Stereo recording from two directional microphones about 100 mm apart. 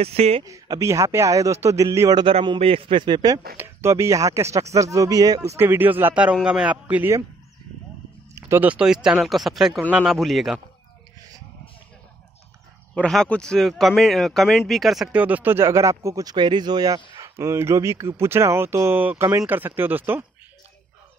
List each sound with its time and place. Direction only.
0.0 s speech: 90° right
0.5 s a man's voice: 35° right (ahead or behind)
2.6 s a man's voice: 65° right (ahead or behind); by 3.3 s 50° right (ahead or behind)
3.5 s speech: 25° right (ahead or behind)
6.4 s a man's voice: 10° right (ahead or behind)
8.4 s a sound: 30° right (ahead or behind)
8.6 s speech: 10° right (ahead or behind)
12.9 s speech: 5° left (ahead or behind)
15.1 s speech: 15° right (ahead or behind); by 16.3 s 35° right (ahead or behind)
16.3 s speech: 50° right (ahead or behind); by 20.2 s 20° right (ahead or behind)